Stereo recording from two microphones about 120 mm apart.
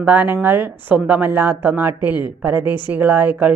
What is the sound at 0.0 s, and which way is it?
A woman's voice, 15° right (ahead or behind).